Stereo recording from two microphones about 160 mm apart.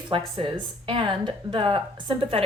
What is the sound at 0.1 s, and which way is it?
Speech, 30° right (ahead or behind).